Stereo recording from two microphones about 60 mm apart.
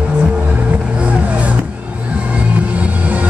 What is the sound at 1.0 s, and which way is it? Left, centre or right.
Vehicle, right.